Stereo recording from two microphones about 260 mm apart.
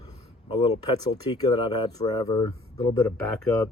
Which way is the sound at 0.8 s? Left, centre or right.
Centre.